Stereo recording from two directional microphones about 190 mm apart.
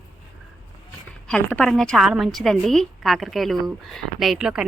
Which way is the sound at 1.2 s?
5° left (ahead or behind).